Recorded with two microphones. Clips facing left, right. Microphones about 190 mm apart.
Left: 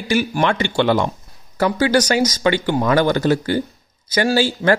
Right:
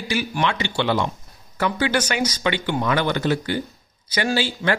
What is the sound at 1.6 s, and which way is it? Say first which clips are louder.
A woman's voice: left 5 dB; 40° left (ahead or behind).